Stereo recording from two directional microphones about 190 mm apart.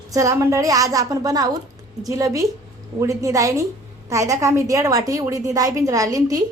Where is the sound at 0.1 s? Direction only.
15° right (ahead or behind).